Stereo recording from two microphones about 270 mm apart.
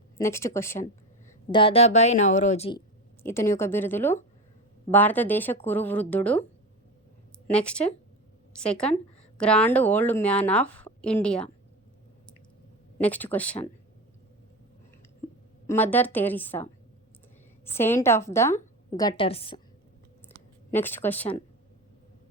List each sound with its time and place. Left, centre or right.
0.2 s a woman's voice: centre
3.2 s a woman's voice: centre
7.5 s speech: centre
13.0 s speech: centre
15.6 s a woman's voice: centre
17.7 s a woman's voice: centre
20.2 s a sound: centre